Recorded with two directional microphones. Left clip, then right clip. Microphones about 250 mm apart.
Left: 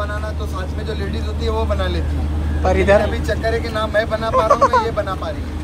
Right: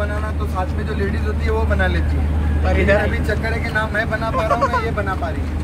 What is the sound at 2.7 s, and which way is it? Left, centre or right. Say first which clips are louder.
Speech: left 3 dB; left.